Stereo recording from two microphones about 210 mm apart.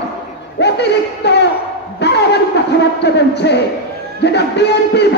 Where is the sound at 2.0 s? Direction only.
55° left (ahead or behind).